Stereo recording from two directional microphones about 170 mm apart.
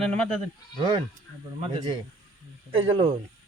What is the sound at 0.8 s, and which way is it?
Speech, 25° right (ahead or behind).